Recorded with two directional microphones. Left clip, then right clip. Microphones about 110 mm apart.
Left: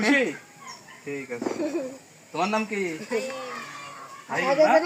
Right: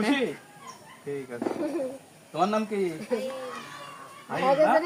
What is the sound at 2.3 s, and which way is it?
Speech, 20° right (ahead or behind).